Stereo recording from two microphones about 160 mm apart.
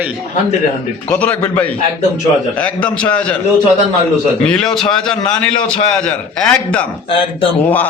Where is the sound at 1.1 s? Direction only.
10° left (ahead or behind).